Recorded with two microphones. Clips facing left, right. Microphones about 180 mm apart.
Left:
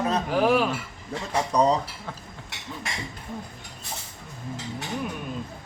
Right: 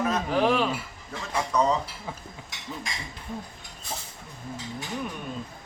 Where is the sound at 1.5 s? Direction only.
35° left (ahead or behind).